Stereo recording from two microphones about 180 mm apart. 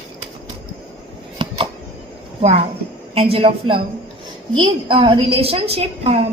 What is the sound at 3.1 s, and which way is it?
A woman's voice, 30° right (ahead or behind).